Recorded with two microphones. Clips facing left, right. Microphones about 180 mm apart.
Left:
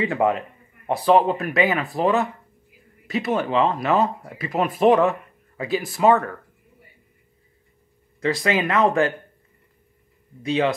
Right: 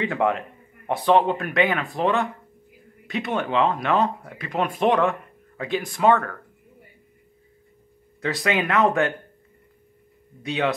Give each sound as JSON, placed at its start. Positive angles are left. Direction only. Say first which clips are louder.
{"t": 0.0, "sound": "speech", "louder": "left 2 dB", "side_deg": 0}
{"t": 8.2, "sound": "speech", "louder": "left 2 dB", "side_deg": 0}
{"t": 10.4, "sound": "speech", "louder": "left 3 dB", "side_deg": 0}